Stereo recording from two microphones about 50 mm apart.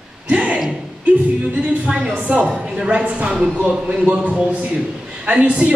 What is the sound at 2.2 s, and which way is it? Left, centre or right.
A man's voice, right.